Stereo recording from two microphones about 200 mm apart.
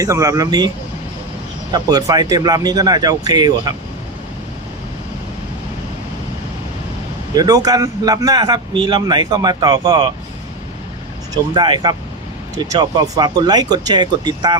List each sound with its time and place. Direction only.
0.0 s speech: 15° right (ahead or behind)
1.7 s speech: 20° right (ahead or behind)
7.3 s speech: 20° right (ahead or behind)
11.5 s speech: 20° right (ahead or behind)